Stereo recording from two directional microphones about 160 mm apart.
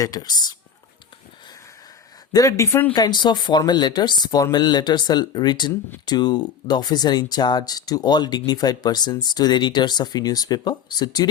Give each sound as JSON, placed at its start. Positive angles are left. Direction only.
{"t": 0.0, "sound": "speech", "side_deg": 25}
{"t": 2.3, "sound": "speech", "side_deg": 20}